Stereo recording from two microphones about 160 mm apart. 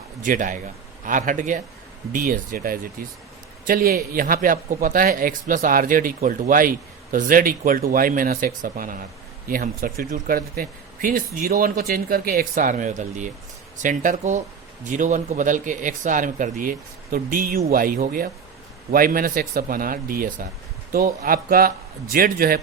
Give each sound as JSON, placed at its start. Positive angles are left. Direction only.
{"t": 0.2, "sound": "a man's voice", "side_deg": -55}